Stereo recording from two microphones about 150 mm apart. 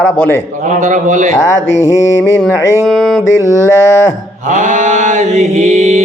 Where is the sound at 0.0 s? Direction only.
15° left (ahead or behind).